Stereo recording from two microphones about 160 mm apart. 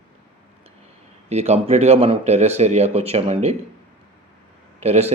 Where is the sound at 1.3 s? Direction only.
40° right (ahead or behind).